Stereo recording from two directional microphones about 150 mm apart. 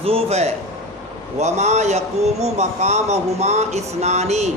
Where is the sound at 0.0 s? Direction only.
45° right (ahead or behind).